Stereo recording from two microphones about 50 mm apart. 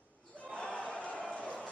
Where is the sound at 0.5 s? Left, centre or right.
Left.